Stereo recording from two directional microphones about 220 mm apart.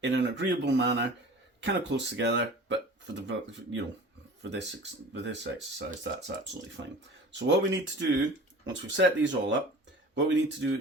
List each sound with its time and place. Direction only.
0.0 s speech: 55° right (ahead or behind)